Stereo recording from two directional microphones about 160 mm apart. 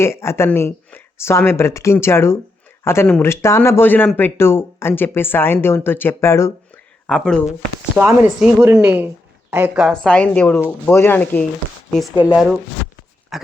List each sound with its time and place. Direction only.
0.0 s speech: 15° left (ahead or behind)
7.1 s a woman's voice: 5° left (ahead or behind)
7.9 s a woman's voice: 10° right (ahead or behind); by 11.4 s 10° left (ahead or behind)
12.2 s a woman's voice: 5° right (ahead or behind)
13.3 s a sound: centre (ahead or behind)